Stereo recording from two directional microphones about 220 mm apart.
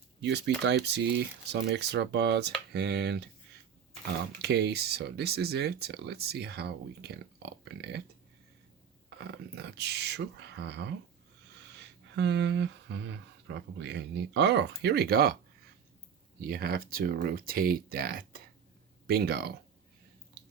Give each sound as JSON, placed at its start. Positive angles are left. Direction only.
{"t": 0.2, "sound": "speech", "side_deg": -50}
{"t": 4.4, "sound": "speech", "side_deg": -50}
{"t": 9.0, "sound": "speech", "side_deg": -50}
{"t": 12.1, "sound": "speech", "side_deg": -50}
{"t": 16.4, "sound": "speech", "side_deg": -45}